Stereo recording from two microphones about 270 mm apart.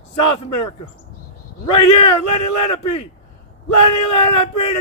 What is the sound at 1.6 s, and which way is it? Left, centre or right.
A man's voice, left.